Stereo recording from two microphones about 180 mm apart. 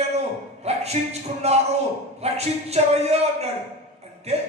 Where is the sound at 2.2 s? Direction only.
35° right (ahead or behind).